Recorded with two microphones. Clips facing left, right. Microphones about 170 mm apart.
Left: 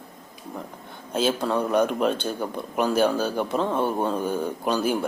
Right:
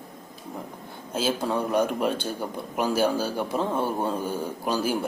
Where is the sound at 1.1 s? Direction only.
5° right (ahead or behind).